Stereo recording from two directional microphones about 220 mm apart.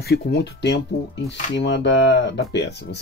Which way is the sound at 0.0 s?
45° left (ahead or behind).